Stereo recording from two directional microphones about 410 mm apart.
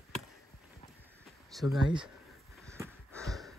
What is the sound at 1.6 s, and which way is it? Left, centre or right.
Speech, centre.